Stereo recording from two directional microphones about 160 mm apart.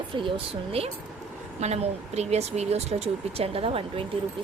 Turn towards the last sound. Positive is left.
turn(degrees=-35)  # may be behind; listen again after turning